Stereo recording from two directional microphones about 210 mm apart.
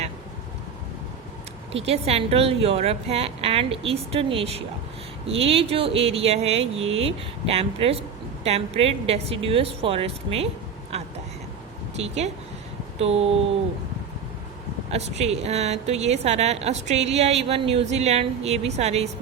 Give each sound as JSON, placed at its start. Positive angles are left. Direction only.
{"t": 1.7, "sound": "a woman's voice", "side_deg": -30}
{"t": 10.9, "sound": "a sound", "side_deg": -30}
{"t": 11.9, "sound": "a woman's voice", "side_deg": -30}
{"t": 14.8, "sound": "a woman's voice", "side_deg": -30}